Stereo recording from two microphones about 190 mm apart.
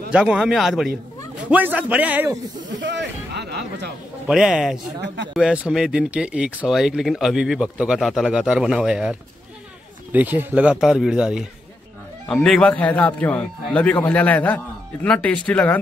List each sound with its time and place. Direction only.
0.1 s a man's voice: 5° right (ahead or behind)
2.7 s a sound: 70° right (ahead or behind)
4.3 s speech: 5° right (ahead or behind)
10.1 s a man's voice: 10° right (ahead or behind); by 15.8 s 10° left (ahead or behind)